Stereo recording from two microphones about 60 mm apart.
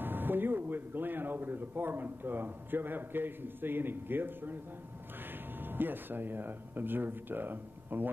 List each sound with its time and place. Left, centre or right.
0.0 s a man's voice: right
5.6 s a man's voice: right